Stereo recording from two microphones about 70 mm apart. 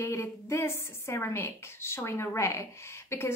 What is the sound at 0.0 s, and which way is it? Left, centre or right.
A woman's voice, left.